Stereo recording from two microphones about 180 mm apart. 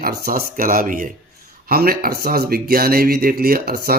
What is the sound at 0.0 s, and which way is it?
Speech, 55° right (ahead or behind).